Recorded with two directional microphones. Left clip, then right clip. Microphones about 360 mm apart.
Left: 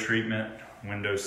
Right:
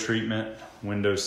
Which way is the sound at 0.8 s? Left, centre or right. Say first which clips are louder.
Right 4 dB; right.